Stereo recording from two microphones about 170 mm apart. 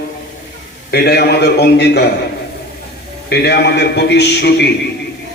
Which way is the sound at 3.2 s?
75° left (ahead or behind).